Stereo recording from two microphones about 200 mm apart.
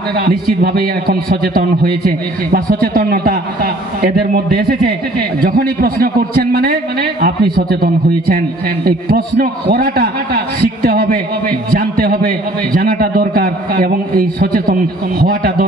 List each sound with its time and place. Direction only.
0.1 s a man's voice: 50° right (ahead or behind)